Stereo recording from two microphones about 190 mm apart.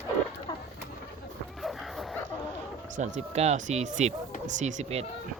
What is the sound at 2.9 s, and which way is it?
Speech, 35° right (ahead or behind).